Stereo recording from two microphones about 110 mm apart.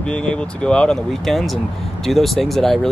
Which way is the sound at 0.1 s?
10° left (ahead or behind).